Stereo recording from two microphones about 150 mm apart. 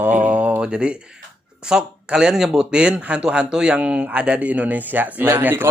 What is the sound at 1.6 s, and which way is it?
Speech, 5° right (ahead or behind).